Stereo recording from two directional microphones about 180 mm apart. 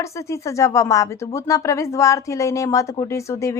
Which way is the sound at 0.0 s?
15° left (ahead or behind).